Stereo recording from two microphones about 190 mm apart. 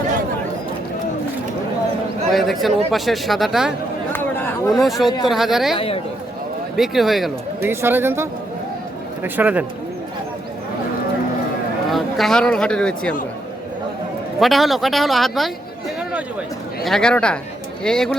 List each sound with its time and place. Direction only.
2.3 s speech: centre (ahead or behind)
4.1 s chatter: 10° left (ahead or behind)
4.7 s speech: centre (ahead or behind)
5.7 s speech: 30° left (ahead or behind)
6.7 s speech: centre (ahead or behind)
7.6 s speech: 10° right (ahead or behind)
11.9 s speech: centre (ahead or behind)
14.3 s speech: centre (ahead or behind)
16.8 s speech: 5° left (ahead or behind)